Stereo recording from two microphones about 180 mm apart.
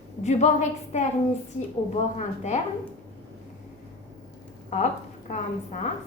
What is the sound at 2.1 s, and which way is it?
Speech, 40° left (ahead or behind).